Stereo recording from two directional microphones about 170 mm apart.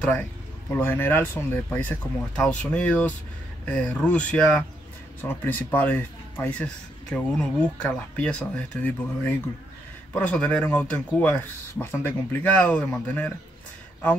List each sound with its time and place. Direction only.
0.0 s speech: 10° left (ahead or behind)